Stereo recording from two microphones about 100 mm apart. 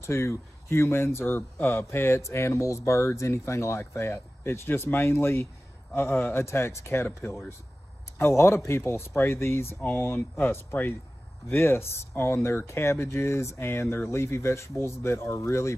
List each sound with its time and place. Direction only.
0.0 s speech: 25° left (ahead or behind)